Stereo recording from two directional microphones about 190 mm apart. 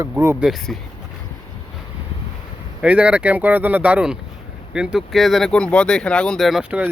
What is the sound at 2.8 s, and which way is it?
Speech, 5° right (ahead or behind).